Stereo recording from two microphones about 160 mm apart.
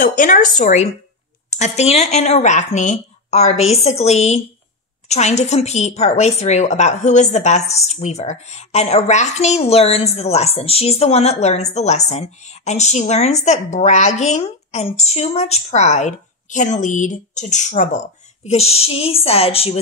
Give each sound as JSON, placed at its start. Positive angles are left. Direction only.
{"t": 0.0, "sound": "a woman's voice", "side_deg": 55}